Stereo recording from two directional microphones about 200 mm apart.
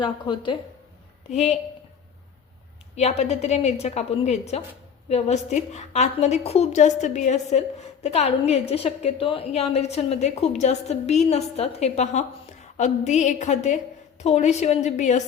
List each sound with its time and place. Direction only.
0.0 s a woman's voice: 25° left (ahead or behind)
2.9 s a woman's voice: 30° left (ahead or behind)